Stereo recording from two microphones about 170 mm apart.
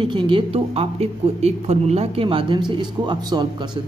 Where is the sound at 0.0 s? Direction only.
30° right (ahead or behind).